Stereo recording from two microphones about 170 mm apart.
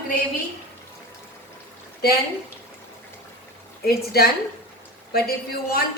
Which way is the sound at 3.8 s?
65° left (ahead or behind).